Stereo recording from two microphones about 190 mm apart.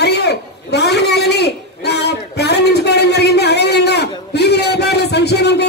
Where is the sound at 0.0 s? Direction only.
60° left (ahead or behind).